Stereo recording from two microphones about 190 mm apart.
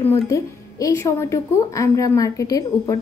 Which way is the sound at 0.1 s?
15° left (ahead or behind).